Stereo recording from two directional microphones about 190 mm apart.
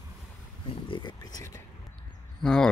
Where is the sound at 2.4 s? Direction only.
5° left (ahead or behind).